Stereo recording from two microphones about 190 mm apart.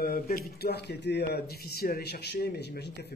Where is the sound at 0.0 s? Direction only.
50° left (ahead or behind).